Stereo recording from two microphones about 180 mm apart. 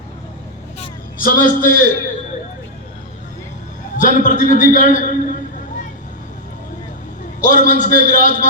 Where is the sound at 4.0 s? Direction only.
45° left (ahead or behind).